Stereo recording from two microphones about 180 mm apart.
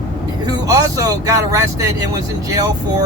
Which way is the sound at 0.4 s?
20° right (ahead or behind).